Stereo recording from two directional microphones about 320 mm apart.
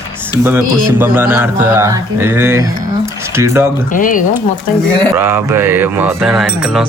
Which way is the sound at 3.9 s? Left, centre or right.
Left.